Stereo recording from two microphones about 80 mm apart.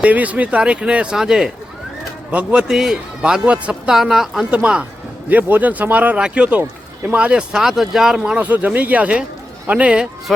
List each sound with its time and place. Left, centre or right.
0.0 s speech: centre
4.5 s speech: centre